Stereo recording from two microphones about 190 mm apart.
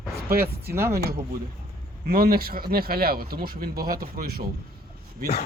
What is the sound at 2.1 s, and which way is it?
Speech, 50° right (ahead or behind).